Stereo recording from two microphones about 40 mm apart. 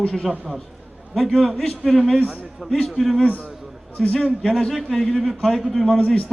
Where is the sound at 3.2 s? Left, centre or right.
Left.